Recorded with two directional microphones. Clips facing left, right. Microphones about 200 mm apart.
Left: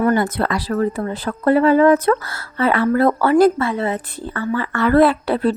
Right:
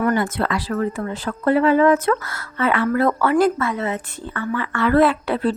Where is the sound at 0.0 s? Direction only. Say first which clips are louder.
Left 3 dB; 35° left (ahead or behind).